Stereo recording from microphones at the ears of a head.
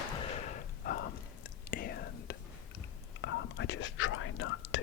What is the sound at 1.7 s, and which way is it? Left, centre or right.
Whispering, left.